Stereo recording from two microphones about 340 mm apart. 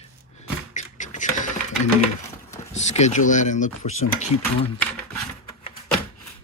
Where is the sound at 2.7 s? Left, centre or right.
Centre.